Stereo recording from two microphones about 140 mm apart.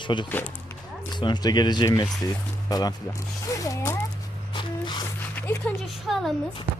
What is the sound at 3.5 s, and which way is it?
Zipper, 25° left (ahead or behind).